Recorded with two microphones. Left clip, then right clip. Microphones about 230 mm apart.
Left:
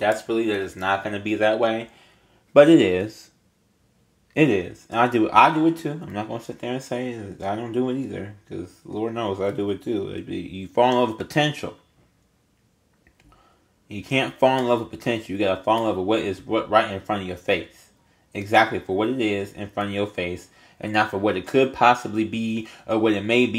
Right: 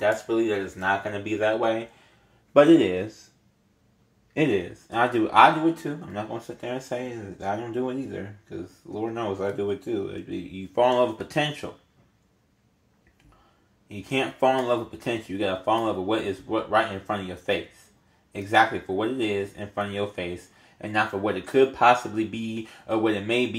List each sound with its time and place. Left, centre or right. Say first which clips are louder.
0.0 s speech: left 2 dB; left
4.3 s speech: left 4 dB; left
13.8 s speech: left 3 dB; left